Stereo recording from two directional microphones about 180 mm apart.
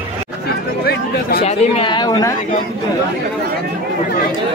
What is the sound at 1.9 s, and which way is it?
Speech, 20° left (ahead or behind).